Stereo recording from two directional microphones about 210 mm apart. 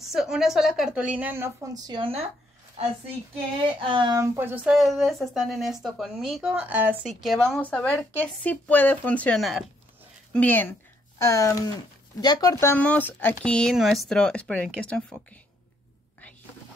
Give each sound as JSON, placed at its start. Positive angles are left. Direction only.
{"t": 0.0, "sound": "a woman's voice", "side_deg": 0}